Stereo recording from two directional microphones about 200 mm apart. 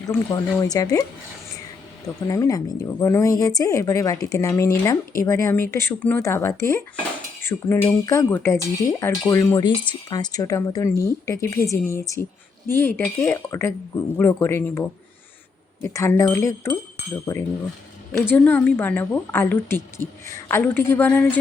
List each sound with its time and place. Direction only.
0.1 s speech: 20° left (ahead or behind)
2.2 s speech: 15° left (ahead or behind)